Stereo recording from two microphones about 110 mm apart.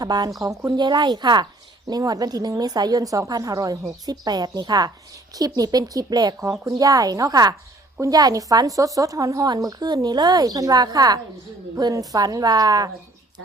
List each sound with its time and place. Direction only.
0.0 s a woman's voice: 35° right (ahead or behind)
0.8 s a woman's voice: 45° right (ahead or behind)